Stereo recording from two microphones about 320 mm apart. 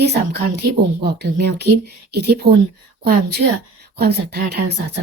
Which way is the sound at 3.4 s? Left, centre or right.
Right.